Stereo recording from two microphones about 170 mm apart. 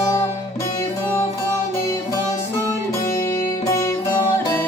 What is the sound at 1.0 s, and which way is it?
Music, 15° left (ahead or behind).